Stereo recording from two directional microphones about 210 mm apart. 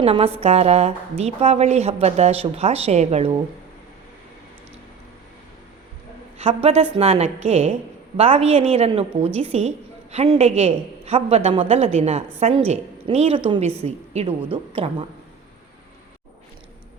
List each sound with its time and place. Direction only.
0.0 s a woman's voice: 30° right (ahead or behind)
6.4 s a woman's voice: 30° right (ahead or behind)